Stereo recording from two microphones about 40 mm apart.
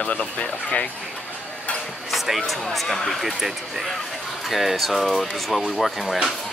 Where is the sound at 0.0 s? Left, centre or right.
Left.